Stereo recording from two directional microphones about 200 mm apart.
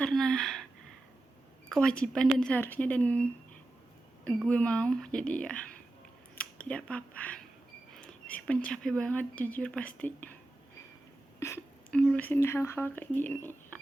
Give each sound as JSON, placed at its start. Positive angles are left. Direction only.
{"t": 0.0, "sound": "a sound", "side_deg": 0}
{"t": 1.7, "sound": "speech", "side_deg": 5}
{"t": 4.4, "sound": "speech", "side_deg": 5}
{"t": 11.3, "sound": "speech", "side_deg": 10}